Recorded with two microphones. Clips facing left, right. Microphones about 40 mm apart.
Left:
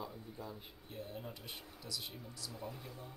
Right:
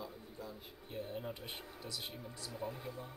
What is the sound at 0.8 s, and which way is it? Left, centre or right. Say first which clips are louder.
Speech: right 4 dB; right.